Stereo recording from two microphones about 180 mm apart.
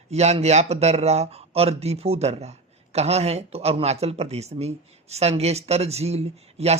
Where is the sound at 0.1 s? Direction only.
35° right (ahead or behind).